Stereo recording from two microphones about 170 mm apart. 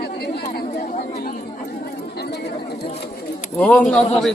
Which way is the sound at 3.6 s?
5° left (ahead or behind).